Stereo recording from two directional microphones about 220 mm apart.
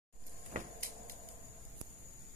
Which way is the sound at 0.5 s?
35° right (ahead or behind).